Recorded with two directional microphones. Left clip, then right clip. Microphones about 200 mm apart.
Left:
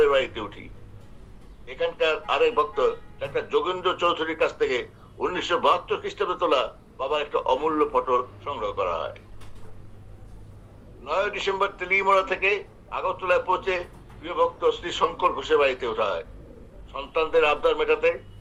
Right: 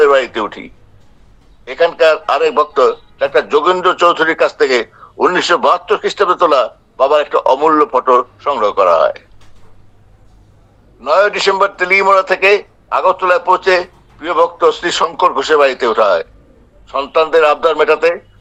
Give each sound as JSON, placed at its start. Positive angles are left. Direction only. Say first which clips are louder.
{"t": 0.0, "sound": "a man's voice", "louder": "right 11 dB", "side_deg": -65}
{"t": 11.0, "sound": "a man's voice", "louder": "right 15 dB", "side_deg": -65}